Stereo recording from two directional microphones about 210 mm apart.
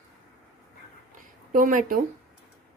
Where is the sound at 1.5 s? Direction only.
40° right (ahead or behind).